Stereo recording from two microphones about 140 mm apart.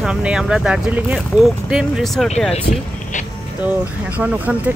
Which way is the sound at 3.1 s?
60° left (ahead or behind).